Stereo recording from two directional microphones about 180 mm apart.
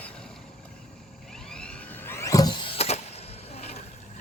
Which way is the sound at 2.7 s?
35° left (ahead or behind).